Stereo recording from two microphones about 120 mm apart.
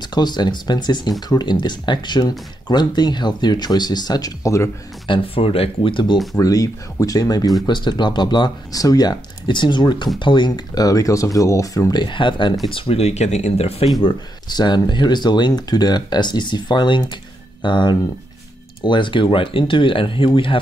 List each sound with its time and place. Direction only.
0.0 s speech: 35° left (ahead or behind)
5.0 s speech: 45° left (ahead or behind)
6.4 s speech: 30° left (ahead or behind); by 13.8 s 60° left (ahead or behind)
14.0 s speech: 35° left (ahead or behind)